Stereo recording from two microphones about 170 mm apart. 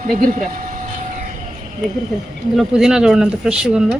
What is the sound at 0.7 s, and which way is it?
Vehicle, 50° right (ahead or behind).